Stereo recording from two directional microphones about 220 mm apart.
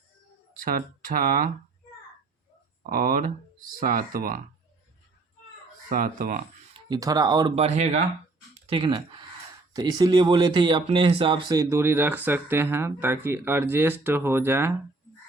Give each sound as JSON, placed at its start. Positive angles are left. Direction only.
{"t": 0.5, "sound": "speech", "side_deg": -40}
{"t": 2.8, "sound": "speech", "side_deg": -40}
{"t": 5.9, "sound": "speech", "side_deg": -40}
{"t": 6.7, "sound": "speech", "side_deg": -20}